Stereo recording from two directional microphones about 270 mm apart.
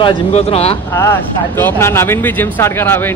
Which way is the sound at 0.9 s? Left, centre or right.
Centre.